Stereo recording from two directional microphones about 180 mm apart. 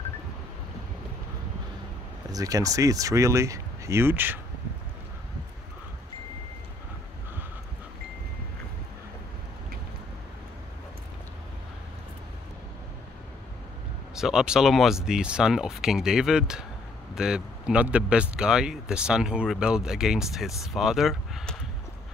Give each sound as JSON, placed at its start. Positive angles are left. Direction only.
{"t": 2.3, "sound": "speech", "side_deg": -20}
{"t": 14.1, "sound": "speech", "side_deg": -5}